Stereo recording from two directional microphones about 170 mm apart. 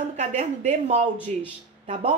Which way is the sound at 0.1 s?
45° right (ahead or behind).